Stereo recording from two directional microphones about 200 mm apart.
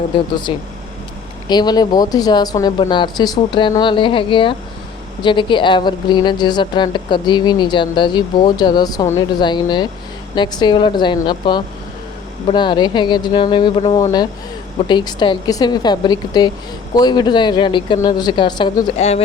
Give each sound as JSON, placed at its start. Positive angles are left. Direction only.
{"t": 0.5, "sound": "a woman's voice", "side_deg": 25}
{"t": 18.9, "sound": "speech", "side_deg": 35}